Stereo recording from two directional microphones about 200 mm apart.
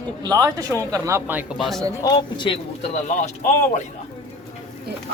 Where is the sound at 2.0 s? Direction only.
25° left (ahead or behind).